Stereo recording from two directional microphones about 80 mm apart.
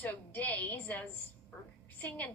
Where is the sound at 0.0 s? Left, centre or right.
Left.